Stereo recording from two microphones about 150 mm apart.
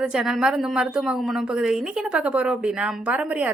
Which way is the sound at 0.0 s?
5° right (ahead or behind).